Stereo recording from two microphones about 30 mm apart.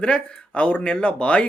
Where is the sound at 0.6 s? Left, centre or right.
Left.